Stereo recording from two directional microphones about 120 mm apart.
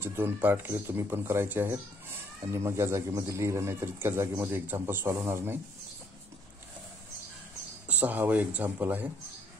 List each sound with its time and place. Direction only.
0.0 s a man's voice: 20° right (ahead or behind)
7.9 s speech: 15° right (ahead or behind)